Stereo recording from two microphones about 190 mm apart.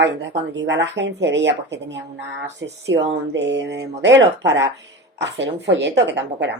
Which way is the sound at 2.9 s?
65° right (ahead or behind).